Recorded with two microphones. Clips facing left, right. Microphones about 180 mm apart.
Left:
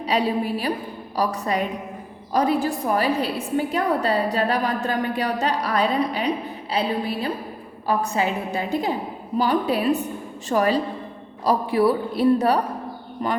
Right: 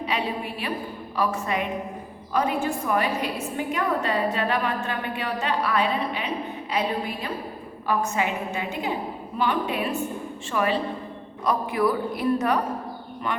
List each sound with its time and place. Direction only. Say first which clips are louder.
0.0 s a woman's voice: left 6 dB; 35° left (ahead or behind)